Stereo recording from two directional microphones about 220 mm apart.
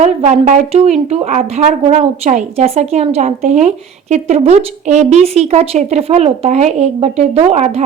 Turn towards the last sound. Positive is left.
turn(degrees=-30)  # may be behind; listen again after turning